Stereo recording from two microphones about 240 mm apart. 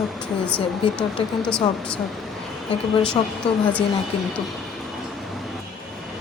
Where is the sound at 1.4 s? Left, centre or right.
Centre.